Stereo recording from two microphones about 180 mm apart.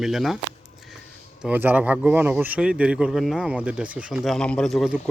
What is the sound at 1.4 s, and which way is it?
Speech, 10° right (ahead or behind).